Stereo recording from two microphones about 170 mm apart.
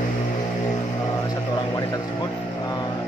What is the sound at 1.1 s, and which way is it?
Speech, 20° left (ahead or behind).